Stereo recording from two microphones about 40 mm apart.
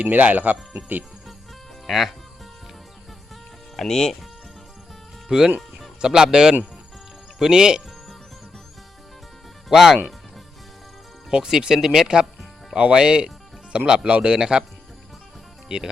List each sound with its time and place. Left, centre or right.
0.0 s speech: right
1.9 s speech: centre
3.8 s speech: centre
5.3 s speech: centre
9.6 s speech: centre
11.3 s speech: centre
15.7 s speech: right